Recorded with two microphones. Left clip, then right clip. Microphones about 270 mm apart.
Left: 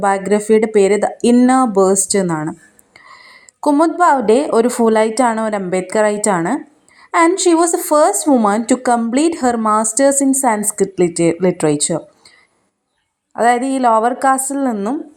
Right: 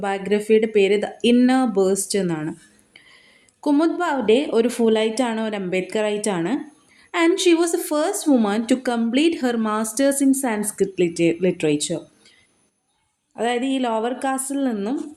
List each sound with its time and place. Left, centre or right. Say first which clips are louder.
0.0 s a woman's voice: left 8 dB; centre
13.3 s a woman's voice: left 9 dB; centre